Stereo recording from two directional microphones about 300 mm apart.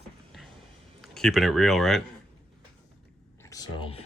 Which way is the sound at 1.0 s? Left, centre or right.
Centre.